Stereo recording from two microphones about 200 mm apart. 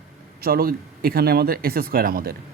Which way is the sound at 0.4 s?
50° right (ahead or behind).